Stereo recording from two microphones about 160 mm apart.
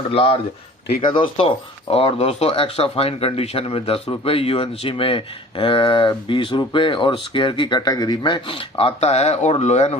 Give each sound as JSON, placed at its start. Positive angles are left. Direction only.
{"t": 0.1, "sound": "speech", "side_deg": 35}